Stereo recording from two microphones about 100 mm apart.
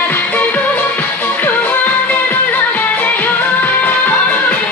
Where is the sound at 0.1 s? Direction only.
15° left (ahead or behind).